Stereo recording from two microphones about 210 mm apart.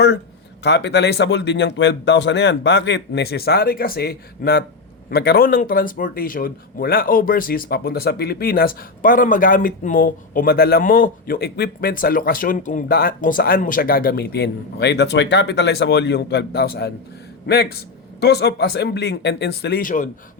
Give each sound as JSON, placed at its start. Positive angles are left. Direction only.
{"t": 0.6, "sound": "speech", "side_deg": 55}